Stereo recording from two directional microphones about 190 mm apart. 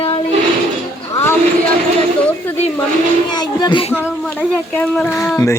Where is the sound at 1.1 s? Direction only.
15° left (ahead or behind).